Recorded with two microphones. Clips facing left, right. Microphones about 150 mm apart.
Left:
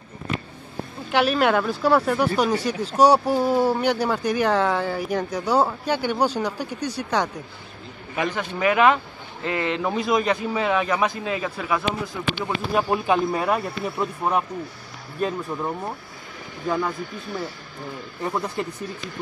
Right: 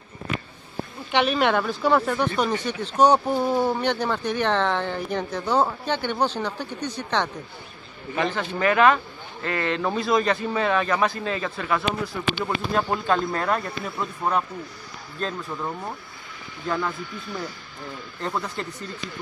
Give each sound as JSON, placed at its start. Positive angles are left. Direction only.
{"t": 1.1, "sound": "speech", "side_deg": 5}
{"t": 2.7, "sound": "speech", "side_deg": 35}
{"t": 3.0, "sound": "speech", "side_deg": 10}
{"t": 18.2, "sound": "speech", "side_deg": 15}